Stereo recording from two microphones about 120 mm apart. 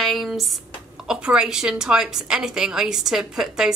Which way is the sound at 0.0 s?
Centre (ahead or behind).